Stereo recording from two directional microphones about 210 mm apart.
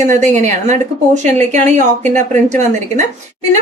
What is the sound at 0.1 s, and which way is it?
A woman's voice, 35° right (ahead or behind).